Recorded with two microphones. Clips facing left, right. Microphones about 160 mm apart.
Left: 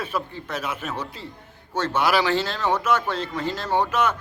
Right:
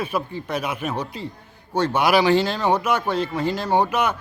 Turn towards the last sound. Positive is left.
turn(degrees=-10)  # may be behind; listen again after turning